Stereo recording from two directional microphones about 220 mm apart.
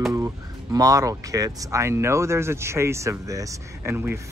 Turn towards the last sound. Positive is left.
turn(degrees=-10)  # may be behind; listen again after turning